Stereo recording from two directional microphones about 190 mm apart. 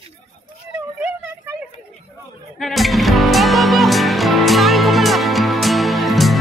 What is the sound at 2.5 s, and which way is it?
Music, centre (ahead or behind).